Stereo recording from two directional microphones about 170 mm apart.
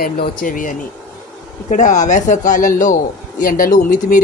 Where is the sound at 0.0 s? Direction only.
55° left (ahead or behind).